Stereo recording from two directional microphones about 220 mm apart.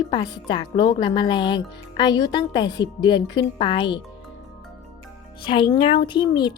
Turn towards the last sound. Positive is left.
turn(degrees=20)  # may be behind; listen again after turning